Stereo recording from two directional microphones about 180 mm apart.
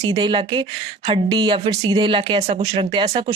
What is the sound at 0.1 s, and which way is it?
Speech, 25° right (ahead or behind).